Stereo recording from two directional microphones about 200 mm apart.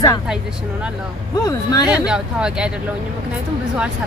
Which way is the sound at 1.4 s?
20° left (ahead or behind).